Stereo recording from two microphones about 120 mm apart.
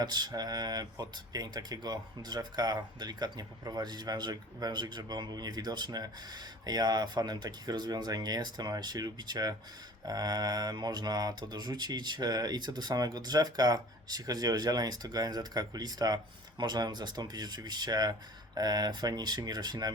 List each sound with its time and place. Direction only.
0.0 s speech: 35° right (ahead or behind)